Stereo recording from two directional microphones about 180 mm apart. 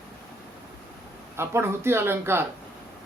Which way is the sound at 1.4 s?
15° right (ahead or behind).